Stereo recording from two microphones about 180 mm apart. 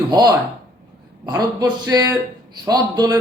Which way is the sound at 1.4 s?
20° right (ahead or behind).